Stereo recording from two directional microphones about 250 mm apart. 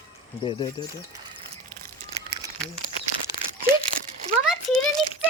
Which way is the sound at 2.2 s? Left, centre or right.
Right.